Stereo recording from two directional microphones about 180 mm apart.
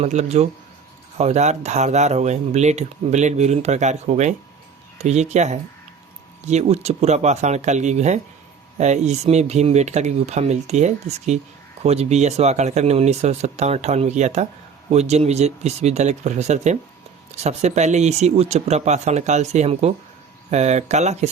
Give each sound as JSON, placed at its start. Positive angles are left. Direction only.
{"t": 0.0, "sound": "speech", "side_deg": -40}